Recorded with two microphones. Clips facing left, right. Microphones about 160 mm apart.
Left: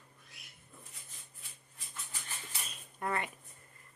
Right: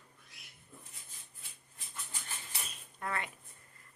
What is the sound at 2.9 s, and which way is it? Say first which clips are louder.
Speech: left 3 dB; 20° left (ahead or behind).